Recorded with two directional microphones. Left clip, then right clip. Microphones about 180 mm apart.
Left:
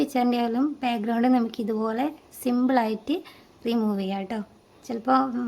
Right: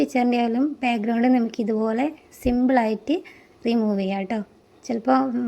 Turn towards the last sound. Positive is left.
turn(degrees=-15)  # may be behind; listen again after turning